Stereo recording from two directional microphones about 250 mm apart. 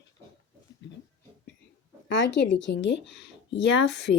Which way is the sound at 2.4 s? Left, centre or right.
Left.